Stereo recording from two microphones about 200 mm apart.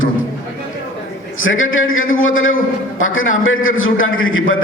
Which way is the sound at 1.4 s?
85° left.